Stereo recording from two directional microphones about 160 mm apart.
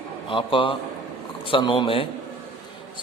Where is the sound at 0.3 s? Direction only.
30° left (ahead or behind).